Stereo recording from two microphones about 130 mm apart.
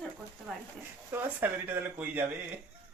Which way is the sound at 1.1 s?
15° right (ahead or behind).